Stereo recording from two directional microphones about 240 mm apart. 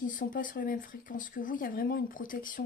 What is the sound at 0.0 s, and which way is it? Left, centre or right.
Speech, left.